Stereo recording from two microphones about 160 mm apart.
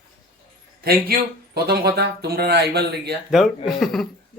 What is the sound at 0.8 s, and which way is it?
Speech, 70° right (ahead or behind).